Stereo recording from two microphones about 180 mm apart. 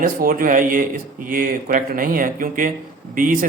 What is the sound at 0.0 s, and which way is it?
A man's voice, 50° right (ahead or behind).